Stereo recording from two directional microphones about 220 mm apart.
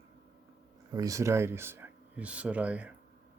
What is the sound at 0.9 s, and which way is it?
Speech, 15° right (ahead or behind).